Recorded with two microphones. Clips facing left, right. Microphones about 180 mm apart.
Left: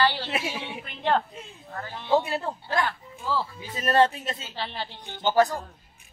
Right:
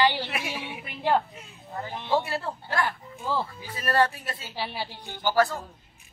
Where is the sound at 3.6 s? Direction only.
20° left (ahead or behind).